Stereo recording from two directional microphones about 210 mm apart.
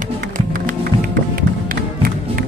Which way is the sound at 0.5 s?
40° right (ahead or behind).